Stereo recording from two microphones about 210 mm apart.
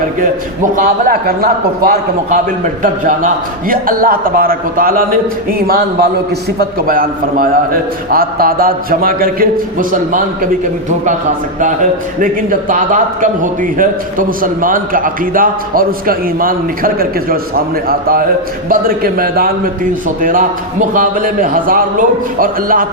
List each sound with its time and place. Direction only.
0.2 s a man's voice: 40° right (ahead or behind)